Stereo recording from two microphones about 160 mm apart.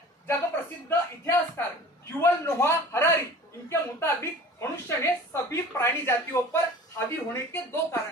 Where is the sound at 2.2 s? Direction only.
15° left (ahead or behind).